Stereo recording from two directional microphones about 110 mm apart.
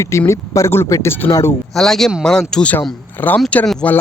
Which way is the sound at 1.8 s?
5° left (ahead or behind).